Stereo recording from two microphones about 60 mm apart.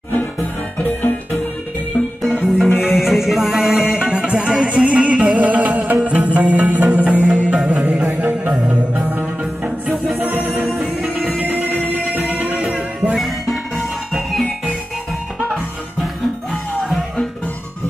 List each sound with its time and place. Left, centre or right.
0.7 s music: left
2.2 s music: centre; by 10.6 s right
10.6 s music: centre
11.3 s music: right
13.1 s music: centre